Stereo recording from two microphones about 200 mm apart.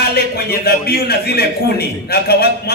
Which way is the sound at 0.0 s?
50° left (ahead or behind).